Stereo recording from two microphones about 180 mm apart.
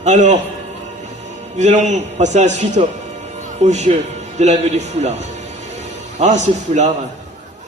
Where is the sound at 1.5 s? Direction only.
40° right (ahead or behind).